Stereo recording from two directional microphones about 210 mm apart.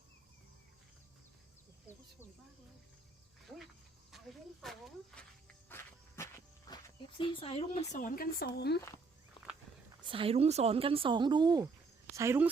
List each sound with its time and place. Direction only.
4.6 s speech: centre (ahead or behind)
5.6 s cricket: 10° left (ahead or behind)
6.7 s music: 15° left (ahead or behind)
7.2 s speech: 25° left (ahead or behind); by 8.8 s 50° left (ahead or behind)
10.0 s speech: 25° right (ahead or behind)